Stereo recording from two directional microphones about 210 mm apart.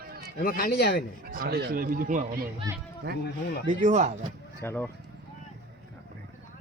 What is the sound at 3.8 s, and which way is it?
Speech, 35° right (ahead or behind).